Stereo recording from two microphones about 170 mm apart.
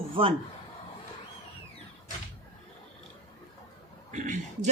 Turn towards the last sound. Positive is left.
turn(degrees=-45)  # may be behind; listen again after turning